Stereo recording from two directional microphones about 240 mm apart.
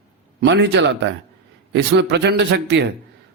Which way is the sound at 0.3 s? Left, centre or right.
Right.